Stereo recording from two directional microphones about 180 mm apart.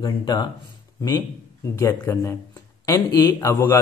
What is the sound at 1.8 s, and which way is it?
Speech, 15° left (ahead or behind).